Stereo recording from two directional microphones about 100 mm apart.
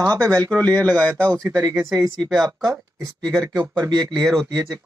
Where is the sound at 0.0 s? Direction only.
35° right (ahead or behind).